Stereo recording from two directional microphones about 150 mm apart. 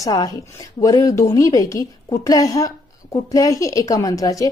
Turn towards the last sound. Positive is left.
turn(degrees=20)  # may be behind; listen again after turning